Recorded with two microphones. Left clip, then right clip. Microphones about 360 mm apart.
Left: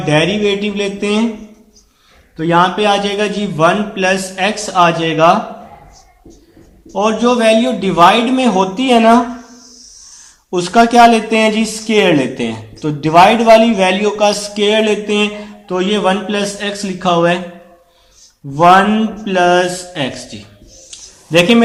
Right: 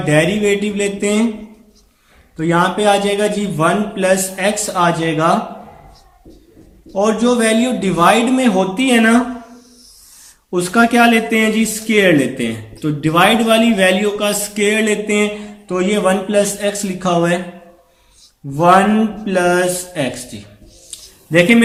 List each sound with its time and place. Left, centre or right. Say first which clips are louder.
0.1 s a man's voice: left 1 dB; centre
2.3 s a man's voice: left 3 dB; centre
6.9 s a man's voice: left 2 dB; centre
10.5 s a man's voice: left 4 dB; centre
18.5 s a man's voice: left 3 dB; centre
21.2 s a man's voice: left 1 dB; centre